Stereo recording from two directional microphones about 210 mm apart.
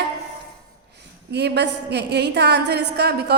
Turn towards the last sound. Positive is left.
turn(degrees=-50)  # may be behind; listen again after turning